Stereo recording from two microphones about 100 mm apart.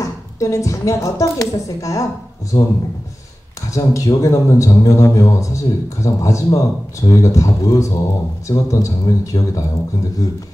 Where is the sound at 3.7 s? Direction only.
30° left (ahead or behind).